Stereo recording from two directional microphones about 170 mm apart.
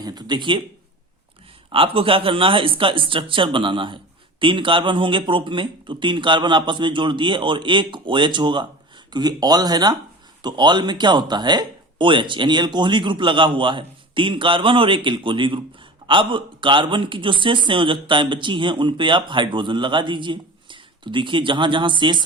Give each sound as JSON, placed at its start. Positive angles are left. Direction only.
{"t": 0.0, "sound": "speech", "side_deg": -25}
{"t": 1.7, "sound": "speech", "side_deg": -30}